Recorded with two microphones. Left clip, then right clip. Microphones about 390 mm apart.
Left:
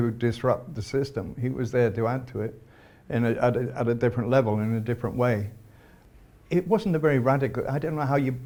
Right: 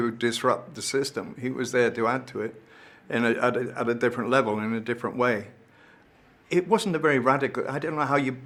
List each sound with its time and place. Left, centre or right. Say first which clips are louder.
0.0 s speech: right 2 dB; left
6.5 s speech: right 1 dB; left